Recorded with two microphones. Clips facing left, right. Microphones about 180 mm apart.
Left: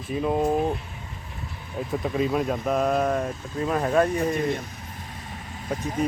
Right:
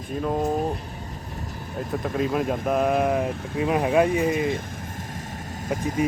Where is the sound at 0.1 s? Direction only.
5° left (ahead or behind).